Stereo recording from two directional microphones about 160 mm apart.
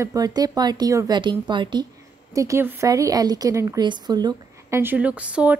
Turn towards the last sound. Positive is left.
turn(degrees=-10)  # may be behind; listen again after turning